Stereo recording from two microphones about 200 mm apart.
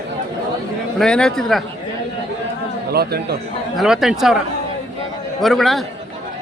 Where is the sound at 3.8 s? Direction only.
Centre (ahead or behind).